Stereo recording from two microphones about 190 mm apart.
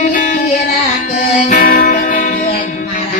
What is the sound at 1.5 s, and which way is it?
Music, 50° left (ahead or behind).